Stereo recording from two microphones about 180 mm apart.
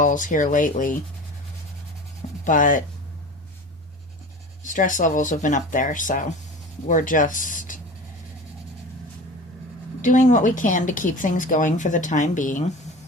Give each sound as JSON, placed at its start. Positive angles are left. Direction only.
{"t": 0.0, "sound": "speech", "side_deg": 45}
{"t": 2.4, "sound": "speech", "side_deg": 45}
{"t": 4.6, "sound": "speech", "side_deg": 45}
{"t": 10.0, "sound": "speech", "side_deg": 45}